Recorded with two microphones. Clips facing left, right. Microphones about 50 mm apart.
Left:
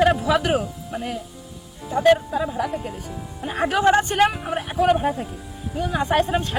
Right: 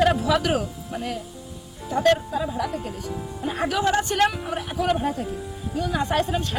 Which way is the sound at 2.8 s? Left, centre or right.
Left.